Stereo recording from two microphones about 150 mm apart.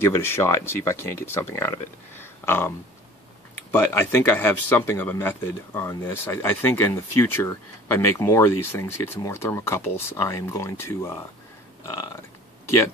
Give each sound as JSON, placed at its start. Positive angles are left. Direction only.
{"t": 0.0, "sound": "speech", "side_deg": 15}
{"t": 3.7, "sound": "speech", "side_deg": 15}